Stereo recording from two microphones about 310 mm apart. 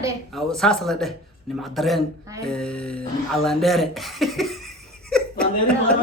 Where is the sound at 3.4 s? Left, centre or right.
Centre.